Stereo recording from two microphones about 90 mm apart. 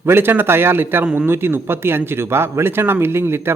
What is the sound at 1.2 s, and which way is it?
Speech, 25° right (ahead or behind).